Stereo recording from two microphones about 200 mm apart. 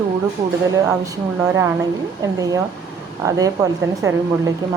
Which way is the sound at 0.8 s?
15° right (ahead or behind).